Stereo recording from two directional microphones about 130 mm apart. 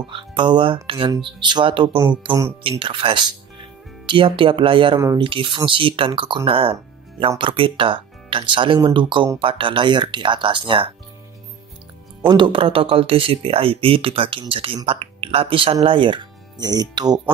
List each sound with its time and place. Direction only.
0.0 s speech: 40° right (ahead or behind)
12.3 s speech: 40° right (ahead or behind)